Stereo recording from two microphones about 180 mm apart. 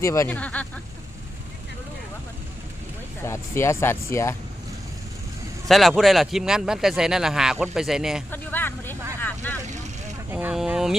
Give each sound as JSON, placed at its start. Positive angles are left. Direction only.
{"t": 0.0, "sound": "speech", "side_deg": 15}
{"t": 3.2, "sound": "speech", "side_deg": 15}
{"t": 5.6, "sound": "speech", "side_deg": 0}
{"t": 8.3, "sound": "speech", "side_deg": 10}
{"t": 9.2, "sound": "vehicle", "side_deg": 10}
{"t": 10.2, "sound": "speech", "side_deg": -10}